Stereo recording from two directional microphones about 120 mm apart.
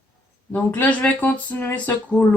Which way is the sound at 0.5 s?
15° left (ahead or behind).